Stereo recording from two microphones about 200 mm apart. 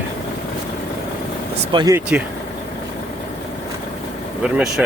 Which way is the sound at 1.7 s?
20° right (ahead or behind).